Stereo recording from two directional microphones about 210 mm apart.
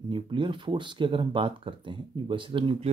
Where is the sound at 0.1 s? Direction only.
25° right (ahead or behind).